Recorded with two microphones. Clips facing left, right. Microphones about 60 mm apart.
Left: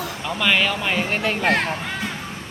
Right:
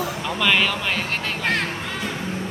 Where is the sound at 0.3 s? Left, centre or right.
Centre.